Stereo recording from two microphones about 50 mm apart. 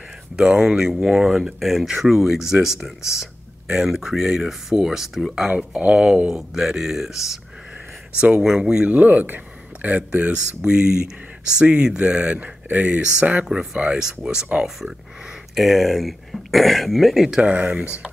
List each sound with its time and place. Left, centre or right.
0.4 s speech: centre
1.6 s speech: centre
5.8 s speech: right
6.3 s speech: centre
8.4 s speech: centre
8.8 s speech: right
10.3 s speech: centre
13.9 s speech: centre
15.5 s speech: centre
17.4 s speech: right